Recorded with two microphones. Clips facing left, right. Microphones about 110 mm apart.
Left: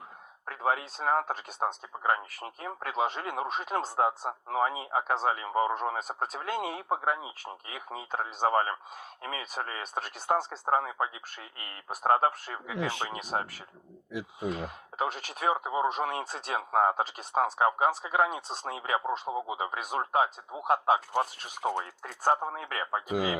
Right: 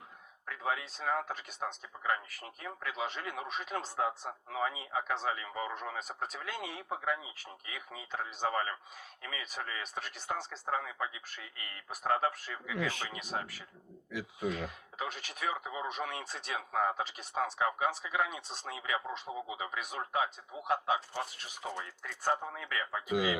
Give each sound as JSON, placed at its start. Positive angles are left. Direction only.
{"t": 0.4, "sound": "speech", "side_deg": 45}
{"t": 14.1, "sound": "speech", "side_deg": 30}